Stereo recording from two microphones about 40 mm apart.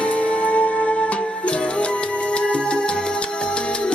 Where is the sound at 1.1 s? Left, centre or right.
Left.